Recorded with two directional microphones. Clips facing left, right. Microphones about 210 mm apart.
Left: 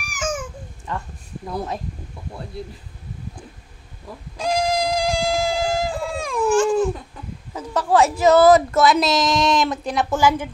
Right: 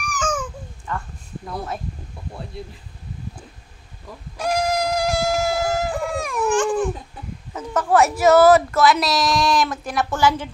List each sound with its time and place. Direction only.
0.1 s babbling: 25° left (ahead or behind)
4.4 s a sound: 15° left (ahead or behind)
7.5 s a woman's voice: 10° left (ahead or behind)